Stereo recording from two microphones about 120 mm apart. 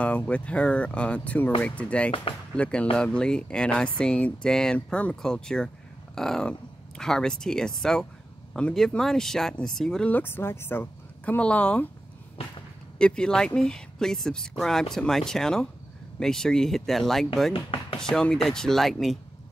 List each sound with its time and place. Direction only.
0.0 s speech: 10° left (ahead or behind)
13.0 s speech: 5° left (ahead or behind)
17.5 s speech: 50° left (ahead or behind)
17.9 s speech: 5° left (ahead or behind)